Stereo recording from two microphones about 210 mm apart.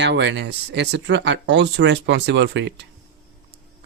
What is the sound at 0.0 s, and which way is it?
Speech, 55° right (ahead or behind).